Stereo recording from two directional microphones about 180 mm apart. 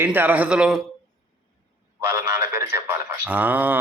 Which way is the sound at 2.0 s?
15° right (ahead or behind).